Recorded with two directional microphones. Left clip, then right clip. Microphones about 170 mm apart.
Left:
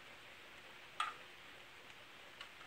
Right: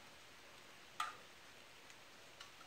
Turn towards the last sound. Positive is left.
turn(degrees=-30)  # may be behind; listen again after turning